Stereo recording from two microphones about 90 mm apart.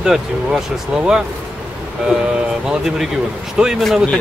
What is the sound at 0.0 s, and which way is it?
Speech, 5° right (ahead or behind).